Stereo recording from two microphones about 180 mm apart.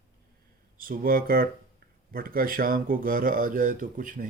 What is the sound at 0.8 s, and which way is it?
Speech, 50° right (ahead or behind).